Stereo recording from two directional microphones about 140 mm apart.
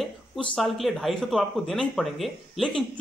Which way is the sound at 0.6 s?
Centre (ahead or behind).